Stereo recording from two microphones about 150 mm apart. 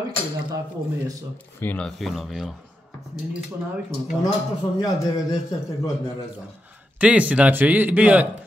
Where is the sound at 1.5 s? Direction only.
10° left (ahead or behind).